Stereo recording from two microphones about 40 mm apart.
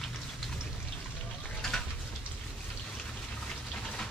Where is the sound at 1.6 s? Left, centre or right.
Centre.